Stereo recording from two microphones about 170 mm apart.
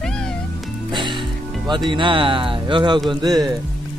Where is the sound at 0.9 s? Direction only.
30° right (ahead or behind).